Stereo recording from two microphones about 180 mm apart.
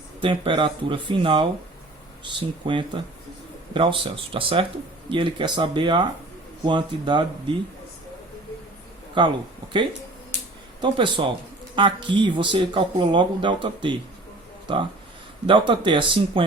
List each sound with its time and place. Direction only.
0.2 s speech: 30° right (ahead or behind)
2.6 s speech: 25° right (ahead or behind)
9.2 s speech: 25° right (ahead or behind)
10.8 s speech: 25° right (ahead or behind)